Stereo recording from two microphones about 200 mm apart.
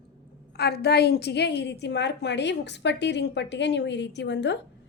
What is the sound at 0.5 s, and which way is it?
A woman's voice, 55° left (ahead or behind).